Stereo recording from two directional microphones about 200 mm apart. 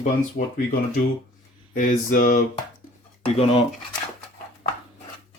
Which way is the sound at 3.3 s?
30° left (ahead or behind).